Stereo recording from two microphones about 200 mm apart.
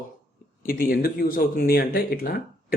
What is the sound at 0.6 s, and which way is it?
Speech, 45° left (ahead or behind).